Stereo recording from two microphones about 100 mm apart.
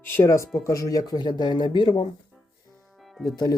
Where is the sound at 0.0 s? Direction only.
25° left (ahead or behind); by 2.0 s 55° left (ahead or behind).